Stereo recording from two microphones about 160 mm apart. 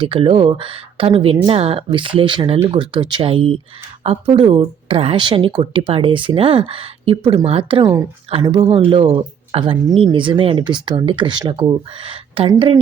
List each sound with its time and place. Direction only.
0.0 s speech: 35° right (ahead or behind)